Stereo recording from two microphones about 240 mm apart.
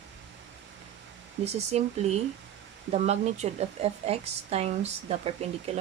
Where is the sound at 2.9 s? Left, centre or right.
Right.